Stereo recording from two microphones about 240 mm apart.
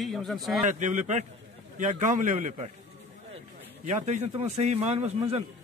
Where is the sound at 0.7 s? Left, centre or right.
Right.